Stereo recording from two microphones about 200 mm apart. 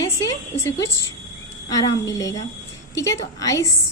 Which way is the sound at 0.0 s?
15° left (ahead or behind).